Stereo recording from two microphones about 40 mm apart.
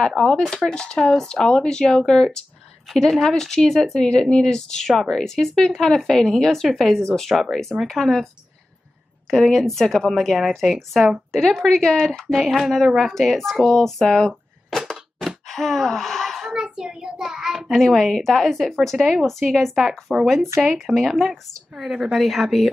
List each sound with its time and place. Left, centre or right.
0.1 s speech: centre
0.7 s a woman's voice: left; by 8.3 s centre
9.3 s a woman's voice: centre
16.5 s child singing: centre
17.8 s a woman's voice: centre
20.1 s a woman's voice: centre